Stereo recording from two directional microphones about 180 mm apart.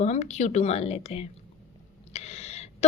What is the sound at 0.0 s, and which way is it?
Speech, 40° left (ahead or behind).